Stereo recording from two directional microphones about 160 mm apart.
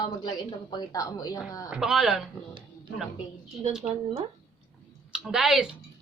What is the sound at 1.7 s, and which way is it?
Speech, centre (ahead or behind).